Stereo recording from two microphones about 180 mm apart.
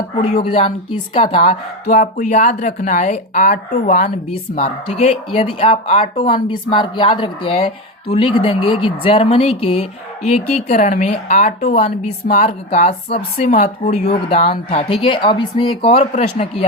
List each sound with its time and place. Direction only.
0.2 s speech: 35° left (ahead or behind)